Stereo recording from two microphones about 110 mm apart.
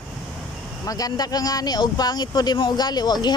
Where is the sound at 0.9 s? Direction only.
35° left (ahead or behind).